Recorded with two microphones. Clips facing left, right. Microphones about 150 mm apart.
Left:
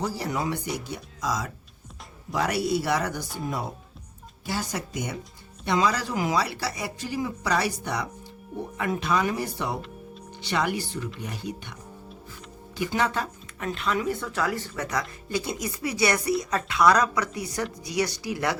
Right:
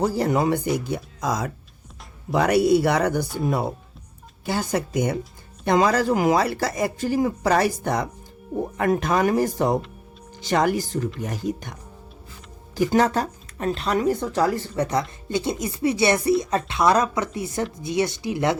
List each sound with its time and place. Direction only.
0.0 s speech: 55° right (ahead or behind)
4.4 s speech: 55° right (ahead or behind); by 18.5 s 25° right (ahead or behind)